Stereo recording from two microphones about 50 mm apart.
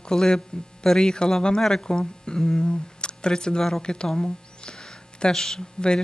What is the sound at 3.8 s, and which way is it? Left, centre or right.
Speech, centre.